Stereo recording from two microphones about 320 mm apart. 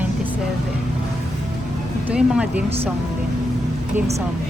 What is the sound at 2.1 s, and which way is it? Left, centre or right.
Speech, centre.